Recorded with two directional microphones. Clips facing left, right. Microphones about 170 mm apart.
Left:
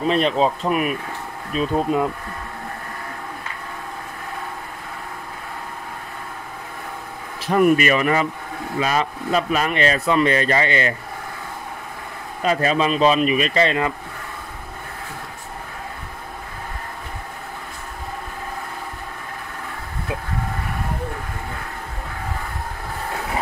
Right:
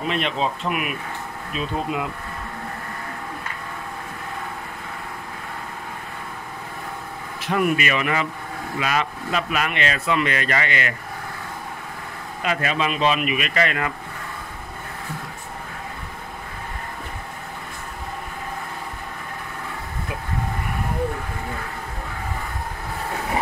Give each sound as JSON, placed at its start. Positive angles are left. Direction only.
{"t": 0.0, "sound": "speech", "side_deg": 35}
{"t": 7.4, "sound": "speech", "side_deg": 40}
{"t": 12.4, "sound": "speech", "side_deg": 35}